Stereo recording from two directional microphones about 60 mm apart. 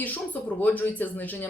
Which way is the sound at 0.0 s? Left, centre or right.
Left.